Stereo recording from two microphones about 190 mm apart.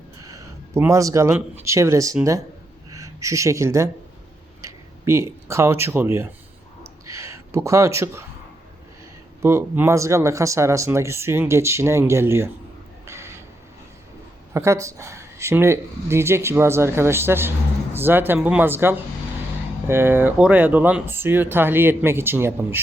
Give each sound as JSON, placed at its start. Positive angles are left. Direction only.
{"t": 0.3, "sound": "a sound", "side_deg": -15}
{"t": 1.6, "sound": "speech", "side_deg": -15}
{"t": 6.8, "sound": "a sound", "side_deg": -15}
{"t": 9.4, "sound": "speech", "side_deg": -15}
{"t": 13.1, "sound": "crow", "side_deg": -15}
{"t": 14.5, "sound": "speech", "side_deg": -15}